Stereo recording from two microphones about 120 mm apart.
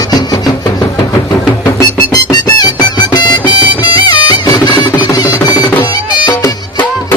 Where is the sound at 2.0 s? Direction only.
35° left (ahead or behind).